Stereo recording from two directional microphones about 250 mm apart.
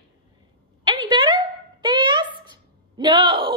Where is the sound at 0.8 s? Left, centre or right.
Centre.